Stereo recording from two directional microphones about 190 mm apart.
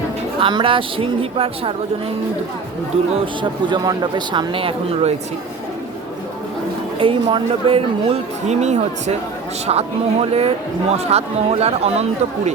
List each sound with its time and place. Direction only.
0.3 s speech: 25° right (ahead or behind)
3.7 s speech: 25° right (ahead or behind)
7.0 s a man's voice: 25° right (ahead or behind)